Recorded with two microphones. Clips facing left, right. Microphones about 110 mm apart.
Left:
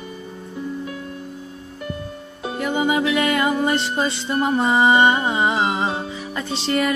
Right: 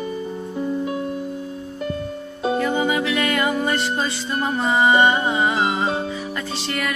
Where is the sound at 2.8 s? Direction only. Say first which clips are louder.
Left 2 dB; 25° left (ahead or behind).